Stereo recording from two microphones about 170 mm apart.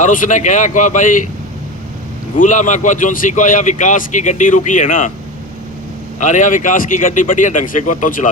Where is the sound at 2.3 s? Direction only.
50° left (ahead or behind).